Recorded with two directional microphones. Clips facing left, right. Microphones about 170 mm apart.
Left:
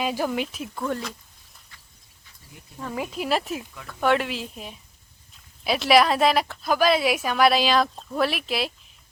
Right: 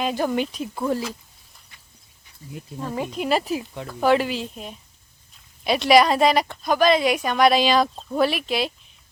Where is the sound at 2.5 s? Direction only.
20° right (ahead or behind).